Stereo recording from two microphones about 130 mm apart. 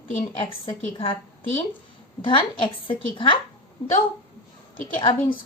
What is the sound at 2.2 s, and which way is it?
A woman's voice, 40° left (ahead or behind).